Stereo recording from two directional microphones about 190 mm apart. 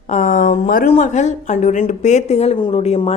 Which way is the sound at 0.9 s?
40° left (ahead or behind).